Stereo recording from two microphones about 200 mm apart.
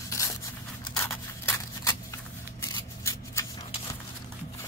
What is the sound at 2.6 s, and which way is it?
Shuffling cards, 15° left (ahead or behind).